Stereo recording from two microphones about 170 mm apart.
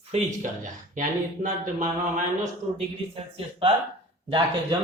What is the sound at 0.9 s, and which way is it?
Speech, 50° right (ahead or behind).